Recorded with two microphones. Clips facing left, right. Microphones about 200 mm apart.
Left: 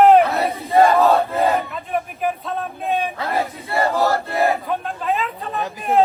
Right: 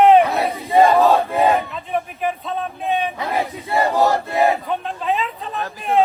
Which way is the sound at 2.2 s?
Centre (ahead or behind).